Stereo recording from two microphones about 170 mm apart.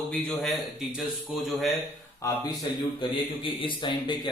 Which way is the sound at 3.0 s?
30° left (ahead or behind).